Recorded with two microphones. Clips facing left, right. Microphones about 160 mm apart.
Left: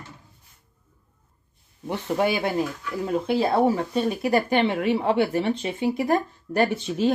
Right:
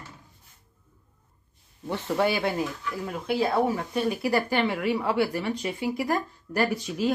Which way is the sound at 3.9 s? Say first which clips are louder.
Left 3 dB; 25° left (ahead or behind).